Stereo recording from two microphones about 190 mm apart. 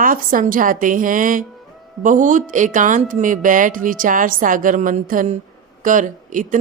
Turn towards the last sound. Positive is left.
turn(degrees=-45)  # may be behind; listen again after turning